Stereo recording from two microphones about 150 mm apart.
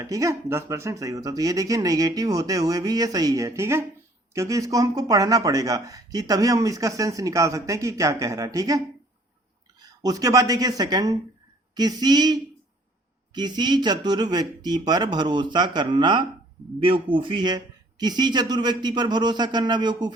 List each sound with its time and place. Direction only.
0.0 s speech: 20° right (ahead or behind)
9.8 s speech: 25° right (ahead or behind)